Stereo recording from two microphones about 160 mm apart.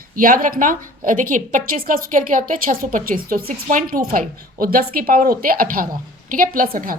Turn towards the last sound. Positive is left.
turn(degrees=-60)  # may be behind; listen again after turning